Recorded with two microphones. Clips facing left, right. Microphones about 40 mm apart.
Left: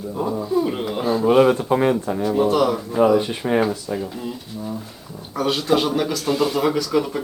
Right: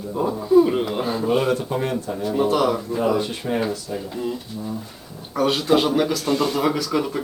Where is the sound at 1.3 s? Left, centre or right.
Centre.